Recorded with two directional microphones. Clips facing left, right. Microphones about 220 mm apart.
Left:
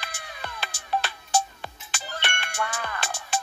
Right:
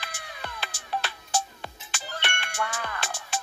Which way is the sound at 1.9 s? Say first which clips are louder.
Left 1 dB; 45° left (ahead or behind).